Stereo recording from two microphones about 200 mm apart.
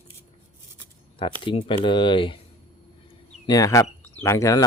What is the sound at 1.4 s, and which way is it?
Speech, 25° left (ahead or behind).